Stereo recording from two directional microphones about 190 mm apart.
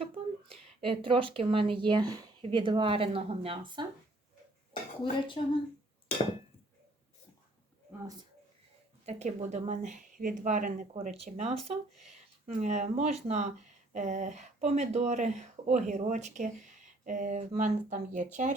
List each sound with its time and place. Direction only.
0.0 s a woman's voice: 30° right (ahead or behind)
5.0 s speech: 25° left (ahead or behind)
9.0 s speech: 35° right (ahead or behind)